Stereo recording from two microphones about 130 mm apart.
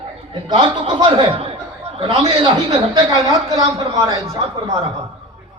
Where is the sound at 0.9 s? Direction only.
40° right (ahead or behind).